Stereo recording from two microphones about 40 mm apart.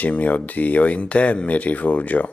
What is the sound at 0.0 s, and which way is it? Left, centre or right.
Speech, left.